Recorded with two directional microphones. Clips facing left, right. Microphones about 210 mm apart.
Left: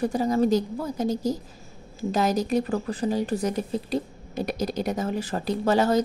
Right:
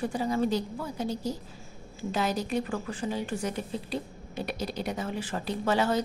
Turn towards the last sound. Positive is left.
turn(degrees=40)  # may be behind; listen again after turning